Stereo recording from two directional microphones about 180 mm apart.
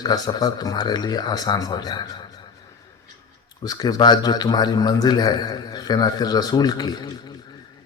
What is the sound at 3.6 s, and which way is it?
A man's voice, 20° left (ahead or behind).